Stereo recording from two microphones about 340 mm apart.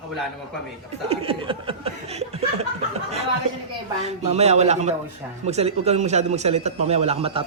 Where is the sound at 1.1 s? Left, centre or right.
Centre.